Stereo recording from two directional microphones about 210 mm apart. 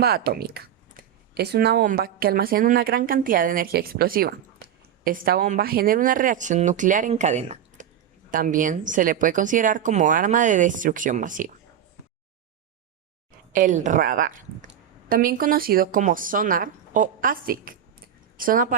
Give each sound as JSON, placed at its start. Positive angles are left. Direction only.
{"t": 0.0, "sound": "speech", "side_deg": -50}
{"t": 13.5, "sound": "speech", "side_deg": -40}